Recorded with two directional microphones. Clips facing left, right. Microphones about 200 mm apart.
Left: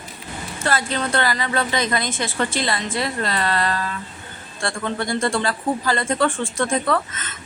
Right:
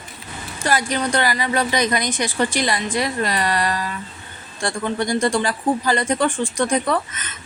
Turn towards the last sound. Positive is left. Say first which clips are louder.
# even
turn(degrees=-20)  # may be behind; listen again after turning